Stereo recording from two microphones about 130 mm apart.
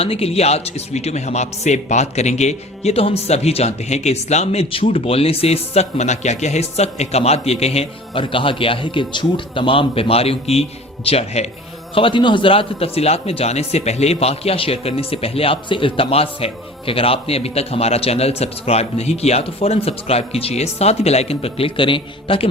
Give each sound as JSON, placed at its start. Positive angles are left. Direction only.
{"t": 0.0, "sound": "a man's voice", "side_deg": 50}
{"t": 11.9, "sound": "a man's voice", "side_deg": 40}